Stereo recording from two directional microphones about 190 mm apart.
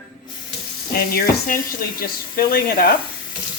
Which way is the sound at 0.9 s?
50° left (ahead or behind).